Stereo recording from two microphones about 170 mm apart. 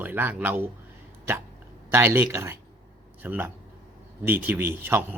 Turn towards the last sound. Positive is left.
turn(degrees=-15)  # may be behind; listen again after turning